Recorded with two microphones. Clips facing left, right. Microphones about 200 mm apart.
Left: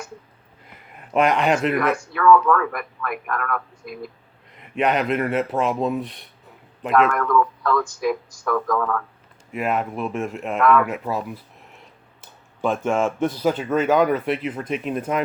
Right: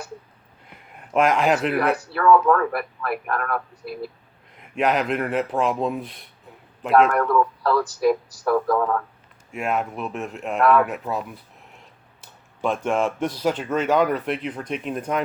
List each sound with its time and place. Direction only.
0.9 s speech: centre (ahead or behind)
1.7 s speech: 35° right (ahead or behind)
4.5 s speech: centre (ahead or behind)
6.9 s speech: 35° right (ahead or behind)
9.5 s speech: centre (ahead or behind)
12.6 s speech: centre (ahead or behind)